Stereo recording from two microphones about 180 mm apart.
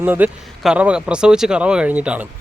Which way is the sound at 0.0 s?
10° right (ahead or behind).